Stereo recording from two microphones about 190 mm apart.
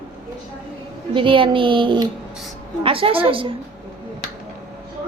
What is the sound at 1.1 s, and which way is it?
A woman's voice, 25° right (ahead or behind).